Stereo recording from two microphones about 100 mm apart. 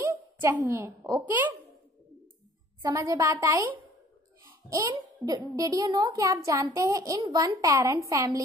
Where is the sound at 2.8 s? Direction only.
35° right (ahead or behind).